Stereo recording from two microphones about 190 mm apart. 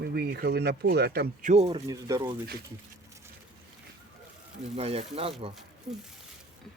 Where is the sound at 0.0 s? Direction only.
55° right (ahead or behind); by 1.8 s 35° right (ahead or behind).